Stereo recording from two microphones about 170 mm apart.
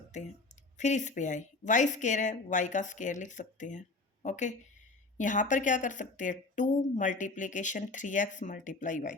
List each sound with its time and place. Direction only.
0.1 s speech: 45° left (ahead or behind)